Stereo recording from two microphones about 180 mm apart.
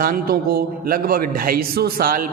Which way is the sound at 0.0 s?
55° right (ahead or behind).